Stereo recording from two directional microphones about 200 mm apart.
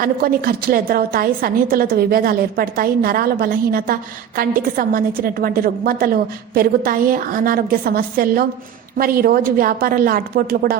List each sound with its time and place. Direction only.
0.0 s a woman's voice: 45° right (ahead or behind)